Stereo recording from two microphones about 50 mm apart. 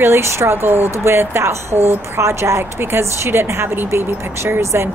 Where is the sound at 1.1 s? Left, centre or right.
Right.